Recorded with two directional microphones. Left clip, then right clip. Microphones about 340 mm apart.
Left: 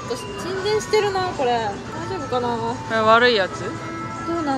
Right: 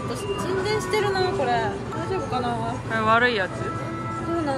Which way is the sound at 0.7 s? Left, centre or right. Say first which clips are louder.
Left 6 dB; centre.